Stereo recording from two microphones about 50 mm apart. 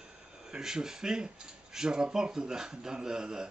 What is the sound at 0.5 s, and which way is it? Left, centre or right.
Speech, centre.